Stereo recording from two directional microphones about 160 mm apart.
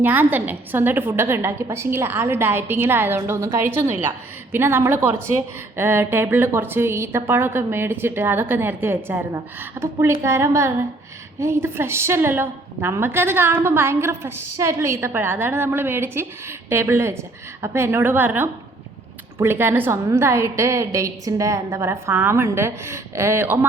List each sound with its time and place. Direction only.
0.0 s a woman's voice: 10° right (ahead or behind)